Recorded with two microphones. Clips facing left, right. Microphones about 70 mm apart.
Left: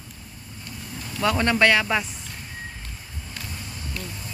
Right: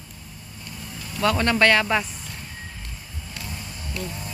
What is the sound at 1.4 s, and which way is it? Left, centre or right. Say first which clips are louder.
Speech: even; centre.